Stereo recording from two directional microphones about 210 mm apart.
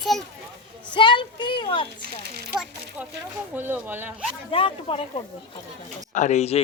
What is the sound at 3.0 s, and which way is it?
Speech, 10° right (ahead or behind).